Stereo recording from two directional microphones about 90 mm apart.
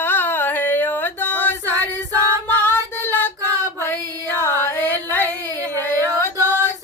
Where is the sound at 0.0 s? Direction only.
25° left (ahead or behind).